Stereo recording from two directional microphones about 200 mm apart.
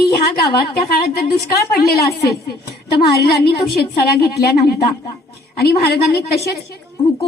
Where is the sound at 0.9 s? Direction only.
50° left (ahead or behind).